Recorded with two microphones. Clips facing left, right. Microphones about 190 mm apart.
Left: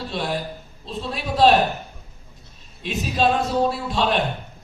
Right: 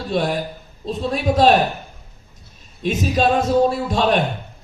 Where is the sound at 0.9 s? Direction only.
45° right (ahead or behind).